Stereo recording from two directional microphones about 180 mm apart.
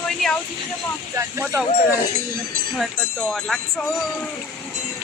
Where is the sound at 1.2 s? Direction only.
15° right (ahead or behind).